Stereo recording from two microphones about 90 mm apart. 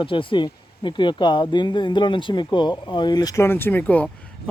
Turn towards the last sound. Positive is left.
turn(degrees=20)  # may be behind; listen again after turning